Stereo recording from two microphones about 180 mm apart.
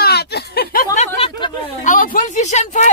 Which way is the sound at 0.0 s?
65° left (ahead or behind).